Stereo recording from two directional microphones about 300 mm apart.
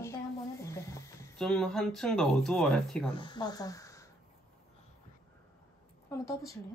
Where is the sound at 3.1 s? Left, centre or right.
Centre.